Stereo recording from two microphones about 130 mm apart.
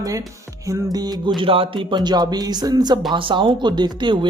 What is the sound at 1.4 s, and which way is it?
Speech, 45° right (ahead or behind).